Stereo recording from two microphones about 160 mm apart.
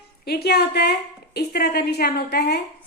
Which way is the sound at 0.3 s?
80° left.